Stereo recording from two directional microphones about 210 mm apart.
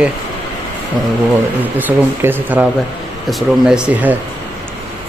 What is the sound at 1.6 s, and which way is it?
Speech, 10° right (ahead or behind).